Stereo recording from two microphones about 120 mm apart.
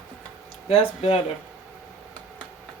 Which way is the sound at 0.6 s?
55° left (ahead or behind).